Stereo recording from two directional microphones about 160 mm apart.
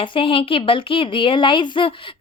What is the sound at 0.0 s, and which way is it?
A woman's voice, 35° left (ahead or behind).